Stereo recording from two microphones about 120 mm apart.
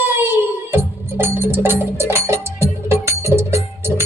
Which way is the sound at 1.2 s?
15° right (ahead or behind).